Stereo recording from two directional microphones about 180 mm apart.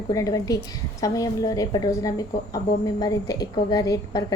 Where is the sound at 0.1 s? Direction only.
20° left (ahead or behind).